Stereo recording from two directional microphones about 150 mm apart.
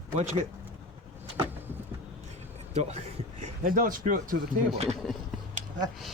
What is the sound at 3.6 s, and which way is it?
Speech, 70° right (ahead or behind).